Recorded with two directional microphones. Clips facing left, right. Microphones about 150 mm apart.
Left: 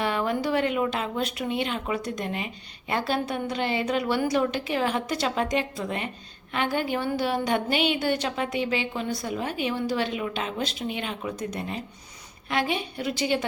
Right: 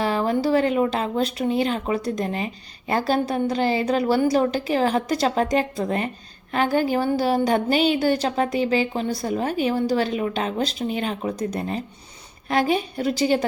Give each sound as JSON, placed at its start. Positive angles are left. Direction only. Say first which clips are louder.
{"t": 0.0, "sound": "a woman's voice", "louder": "right 4 dB", "side_deg": -35}